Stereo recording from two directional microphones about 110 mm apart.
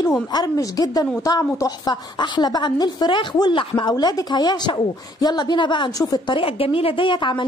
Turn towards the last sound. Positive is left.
turn(degrees=45)  # may be behind; listen again after turning